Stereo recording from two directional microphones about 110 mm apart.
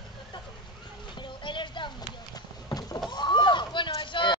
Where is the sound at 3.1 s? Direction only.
45° left (ahead or behind).